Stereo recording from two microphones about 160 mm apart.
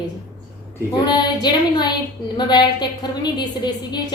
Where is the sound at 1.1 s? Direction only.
25° left (ahead or behind).